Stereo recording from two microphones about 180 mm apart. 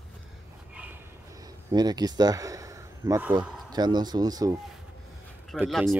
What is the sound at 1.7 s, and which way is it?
Speech, 20° right (ahead or behind).